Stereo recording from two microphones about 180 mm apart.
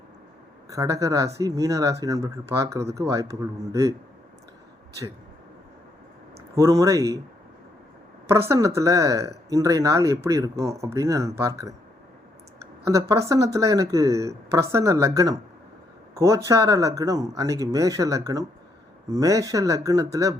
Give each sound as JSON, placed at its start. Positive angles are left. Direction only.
{"t": 0.7, "sound": "speech", "side_deg": -20}
{"t": 6.6, "sound": "speech", "side_deg": -20}
{"t": 8.3, "sound": "speech", "side_deg": -15}
{"t": 12.8, "sound": "speech", "side_deg": -15}